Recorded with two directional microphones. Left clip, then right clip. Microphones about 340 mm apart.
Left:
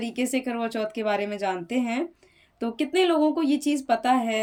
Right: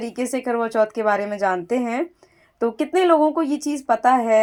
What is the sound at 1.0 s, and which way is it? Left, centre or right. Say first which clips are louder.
Speech: right 6 dB; centre.